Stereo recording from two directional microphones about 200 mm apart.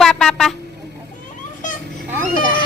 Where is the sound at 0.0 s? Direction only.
Centre (ahead or behind).